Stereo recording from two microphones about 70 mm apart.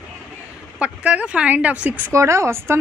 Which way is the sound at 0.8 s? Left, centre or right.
Centre.